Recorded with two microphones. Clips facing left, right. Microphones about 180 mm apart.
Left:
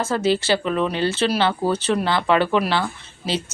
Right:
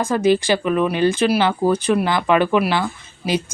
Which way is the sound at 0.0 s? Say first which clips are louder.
Right 4 dB; 15° right (ahead or behind).